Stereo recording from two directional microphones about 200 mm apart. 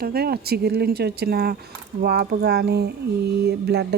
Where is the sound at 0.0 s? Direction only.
50° right (ahead or behind).